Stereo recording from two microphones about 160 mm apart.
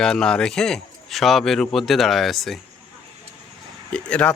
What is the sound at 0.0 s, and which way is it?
A man's voice, 5° left (ahead or behind).